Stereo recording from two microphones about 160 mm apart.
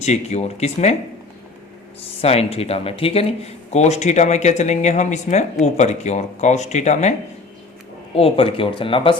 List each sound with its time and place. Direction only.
0.0 s speech: 45° left (ahead or behind)
2.0 s speech: 40° left (ahead or behind)
8.1 s speech: 35° left (ahead or behind)